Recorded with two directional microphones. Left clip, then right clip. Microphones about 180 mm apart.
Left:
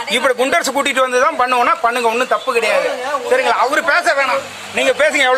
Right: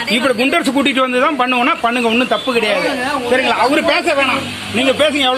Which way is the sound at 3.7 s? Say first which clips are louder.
Right 1 dB; 35° left (ahead or behind).